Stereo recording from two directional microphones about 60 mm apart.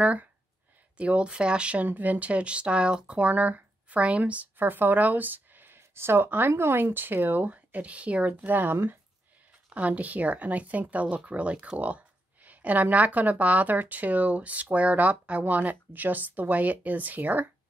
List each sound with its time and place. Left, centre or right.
0.0 s speech: right
1.9 s speech: right
9.8 s speech: right